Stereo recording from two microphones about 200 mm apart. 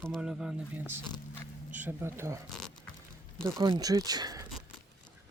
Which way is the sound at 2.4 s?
Centre (ahead or behind).